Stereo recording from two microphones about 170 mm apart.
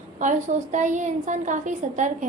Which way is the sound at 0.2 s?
45° right (ahead or behind).